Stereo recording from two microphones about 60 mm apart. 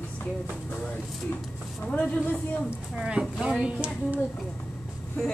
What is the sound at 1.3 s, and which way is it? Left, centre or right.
Speech, left.